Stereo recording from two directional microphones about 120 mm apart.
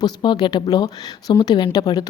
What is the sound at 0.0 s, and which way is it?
A woman's voice, 40° left (ahead or behind).